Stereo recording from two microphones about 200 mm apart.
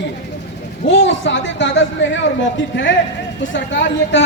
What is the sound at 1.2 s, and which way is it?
Speech, 65° left (ahead or behind).